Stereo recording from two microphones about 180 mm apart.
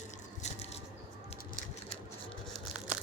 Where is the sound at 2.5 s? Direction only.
5° right (ahead or behind).